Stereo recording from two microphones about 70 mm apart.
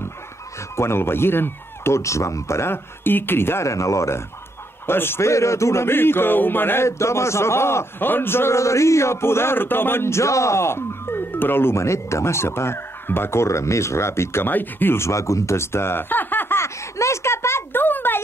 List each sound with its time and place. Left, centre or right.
0.7 s a man's voice: left
3.6 s speech: left
4.8 s a man's voice: left
14.5 s a sound: left